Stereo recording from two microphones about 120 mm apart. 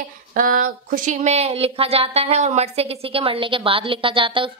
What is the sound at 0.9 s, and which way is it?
Speech, 80° right.